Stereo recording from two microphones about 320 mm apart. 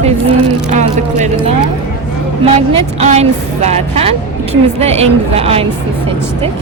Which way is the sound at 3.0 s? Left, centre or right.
Right.